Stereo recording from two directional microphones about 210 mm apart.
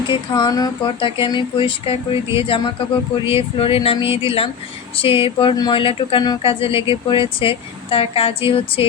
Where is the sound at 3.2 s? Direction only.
25° left (ahead or behind).